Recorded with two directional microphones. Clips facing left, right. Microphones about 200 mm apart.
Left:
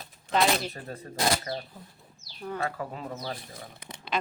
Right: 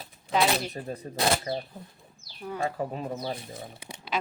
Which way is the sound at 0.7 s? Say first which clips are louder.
Right 3 dB; 20° right (ahead or behind).